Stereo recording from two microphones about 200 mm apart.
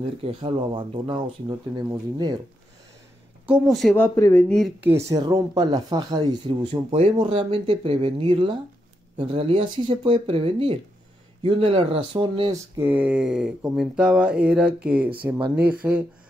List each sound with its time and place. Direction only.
0.2 s speech: 25° right (ahead or behind)
3.4 s speech: centre (ahead or behind)
3.9 s speech: 15° left (ahead or behind); by 12.8 s 25° right (ahead or behind)
12.8 s speech: 5° right (ahead or behind)